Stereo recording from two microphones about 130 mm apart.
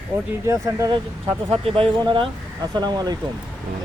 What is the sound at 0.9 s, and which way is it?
Speech, 40° right (ahead or behind).